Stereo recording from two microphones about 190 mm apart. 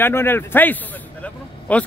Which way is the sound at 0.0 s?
10° left (ahead or behind).